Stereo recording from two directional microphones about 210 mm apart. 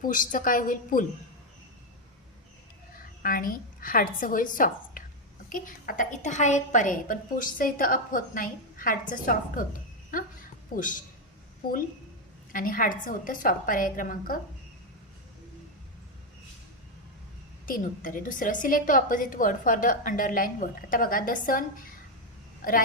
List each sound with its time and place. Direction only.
0.0 s a woman's voice: 40° left (ahead or behind)
3.2 s a woman's voice: 40° left (ahead or behind)
12.5 s a woman's voice: 40° left (ahead or behind)
17.7 s a woman's voice: 40° left (ahead or behind)